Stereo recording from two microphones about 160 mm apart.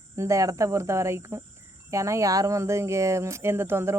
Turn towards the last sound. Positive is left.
turn(degrees=-15)  # may be behind; listen again after turning